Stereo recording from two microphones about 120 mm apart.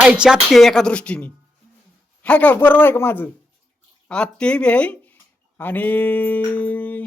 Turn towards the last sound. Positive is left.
turn(degrees=15)  # may be behind; listen again after turning